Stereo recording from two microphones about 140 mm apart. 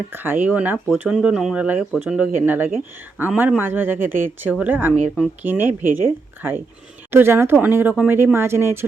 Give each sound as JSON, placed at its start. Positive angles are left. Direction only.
{"t": 0.1, "sound": "speech", "side_deg": -15}